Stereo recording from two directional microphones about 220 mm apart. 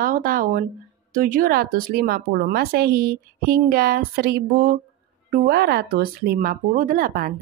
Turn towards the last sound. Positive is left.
turn(degrees=-40)  # may be behind; listen again after turning